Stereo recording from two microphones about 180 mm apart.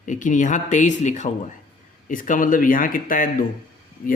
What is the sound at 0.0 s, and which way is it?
Speech, 45° left (ahead or behind).